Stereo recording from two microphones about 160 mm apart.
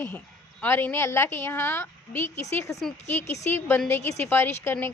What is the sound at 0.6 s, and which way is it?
A woman's voice, 10° left (ahead or behind).